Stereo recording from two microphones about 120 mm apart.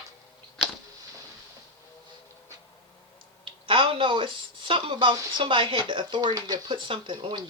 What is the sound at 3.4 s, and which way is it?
Speech, 45° right (ahead or behind).